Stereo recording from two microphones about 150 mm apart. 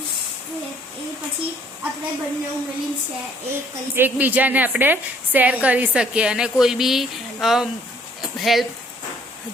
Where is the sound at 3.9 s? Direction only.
10° right (ahead or behind).